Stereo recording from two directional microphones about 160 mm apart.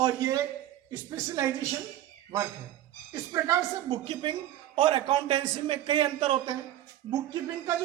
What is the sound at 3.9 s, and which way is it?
A man's voice, 30° right (ahead or behind).